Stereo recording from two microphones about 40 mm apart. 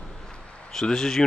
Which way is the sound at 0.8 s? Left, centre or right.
Centre.